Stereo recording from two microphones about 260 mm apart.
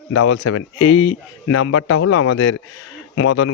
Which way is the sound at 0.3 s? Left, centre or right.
Left.